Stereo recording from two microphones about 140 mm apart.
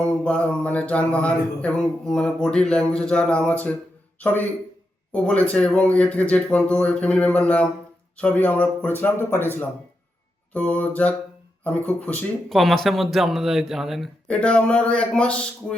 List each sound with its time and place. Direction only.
0.0 s mantra: 10° left (ahead or behind)
4.2 s speech: 15° left (ahead or behind)
5.1 s mantra: 10° left (ahead or behind)
12.5 s speech: centre (ahead or behind)